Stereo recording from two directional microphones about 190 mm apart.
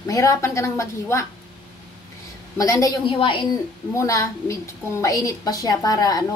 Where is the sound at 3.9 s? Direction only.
15° left (ahead or behind).